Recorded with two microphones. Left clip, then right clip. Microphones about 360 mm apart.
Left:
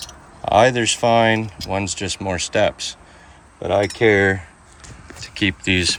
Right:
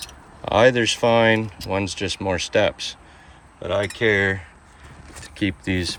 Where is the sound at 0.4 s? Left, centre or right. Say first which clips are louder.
Left 2 dB; centre.